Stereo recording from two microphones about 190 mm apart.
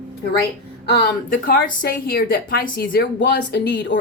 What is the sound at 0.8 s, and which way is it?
A woman's voice, 55° left (ahead or behind).